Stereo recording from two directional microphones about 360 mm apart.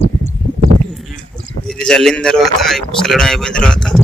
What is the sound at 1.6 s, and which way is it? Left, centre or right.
Speech, centre.